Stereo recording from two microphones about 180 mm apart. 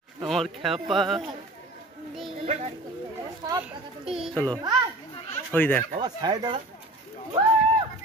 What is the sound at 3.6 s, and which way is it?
Children playing, 5° right (ahead or behind).